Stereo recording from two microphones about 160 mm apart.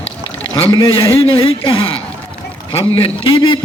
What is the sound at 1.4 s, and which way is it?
A man's voice, 35° left (ahead or behind).